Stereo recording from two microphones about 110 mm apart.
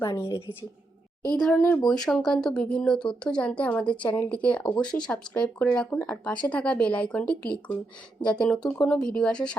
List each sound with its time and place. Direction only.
0.0 s a woman's voice: 35° left (ahead or behind)
1.4 s speech: 5° left (ahead or behind)